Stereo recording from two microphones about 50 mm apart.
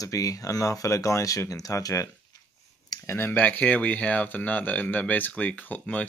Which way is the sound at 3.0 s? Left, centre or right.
Left.